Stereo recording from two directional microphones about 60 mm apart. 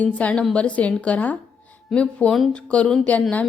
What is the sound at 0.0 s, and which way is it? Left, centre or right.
A woman's voice, left.